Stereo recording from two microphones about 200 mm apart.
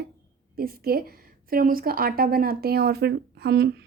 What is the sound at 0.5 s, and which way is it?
A woman's voice, 50° right (ahead or behind).